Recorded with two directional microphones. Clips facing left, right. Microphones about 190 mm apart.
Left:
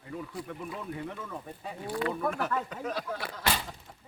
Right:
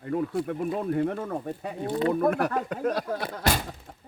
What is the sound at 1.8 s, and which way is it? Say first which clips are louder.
Speech: right 6 dB; 25° right (ahead or behind).